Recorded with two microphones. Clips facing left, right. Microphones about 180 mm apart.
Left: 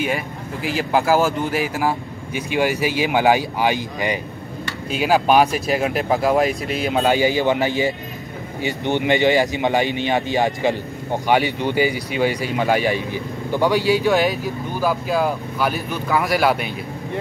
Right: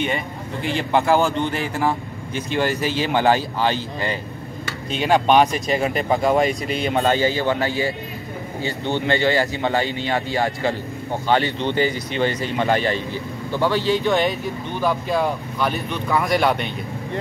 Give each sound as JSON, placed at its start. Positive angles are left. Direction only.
{"t": 0.0, "sound": "speech", "side_deg": 5}